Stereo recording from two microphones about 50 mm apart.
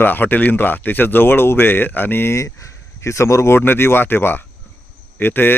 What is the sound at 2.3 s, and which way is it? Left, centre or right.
Speech, left.